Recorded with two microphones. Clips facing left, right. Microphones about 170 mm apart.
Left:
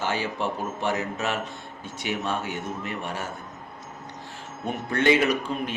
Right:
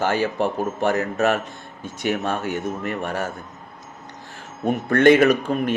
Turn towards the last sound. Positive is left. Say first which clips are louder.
# right 7 dB
turn(degrees=-55)  # may be behind; listen again after turning